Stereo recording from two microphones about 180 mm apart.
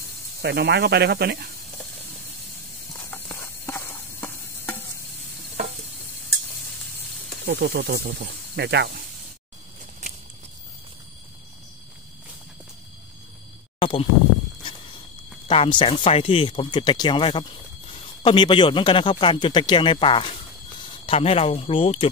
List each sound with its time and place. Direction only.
0.4 s speech: 65° right (ahead or behind)
3.1 s stir: 15° left (ahead or behind)
7.4 s speech: 65° right (ahead or behind)
10.0 s a sound: 40° right (ahead or behind)
13.7 s a sound: 30° left (ahead or behind)
15.4 s speech: 30° left (ahead or behind)